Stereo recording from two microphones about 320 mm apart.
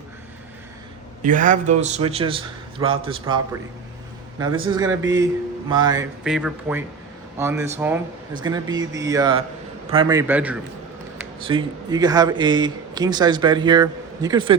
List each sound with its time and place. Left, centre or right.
1.2 s a man's voice: right
4.4 s a man's voice: centre